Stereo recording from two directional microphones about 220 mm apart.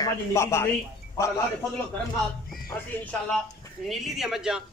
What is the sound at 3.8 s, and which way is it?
Speech, centre (ahead or behind).